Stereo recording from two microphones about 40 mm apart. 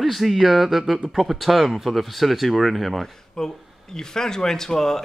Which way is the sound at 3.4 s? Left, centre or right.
Centre.